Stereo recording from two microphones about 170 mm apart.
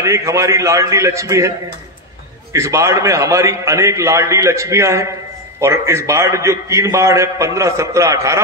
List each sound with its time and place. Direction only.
0.0 s a man's voice: 20° right (ahead or behind)
2.5 s a man's voice: 15° right (ahead or behind)